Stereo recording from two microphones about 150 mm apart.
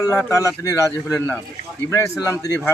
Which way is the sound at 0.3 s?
20° left (ahead or behind).